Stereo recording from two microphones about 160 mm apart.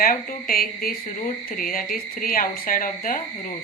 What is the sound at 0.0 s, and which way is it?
Speech, 65° left (ahead or behind).